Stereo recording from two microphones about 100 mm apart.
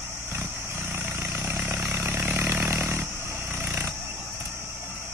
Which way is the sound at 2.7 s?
25° right (ahead or behind).